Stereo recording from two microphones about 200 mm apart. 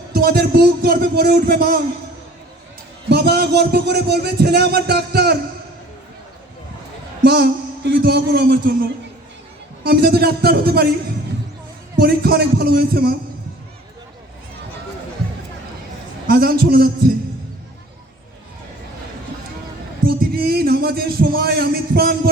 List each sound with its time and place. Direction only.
0.1 s a man's voice: 50° right (ahead or behind)
3.1 s a man's voice: 55° right (ahead or behind)
7.3 s a man's voice: 55° right (ahead or behind)
9.8 s a man's voice: 50° right (ahead or behind)
11.9 s a man's voice: 50° right (ahead or behind)
16.2 s a man's voice: 50° right (ahead or behind)
20.1 s a man's voice: 50° right (ahead or behind)